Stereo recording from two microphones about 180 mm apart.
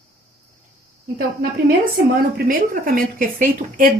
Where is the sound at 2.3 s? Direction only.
55° right (ahead or behind).